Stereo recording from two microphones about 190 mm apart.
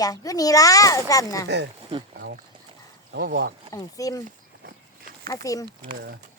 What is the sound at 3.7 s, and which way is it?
Speech, 20° left (ahead or behind).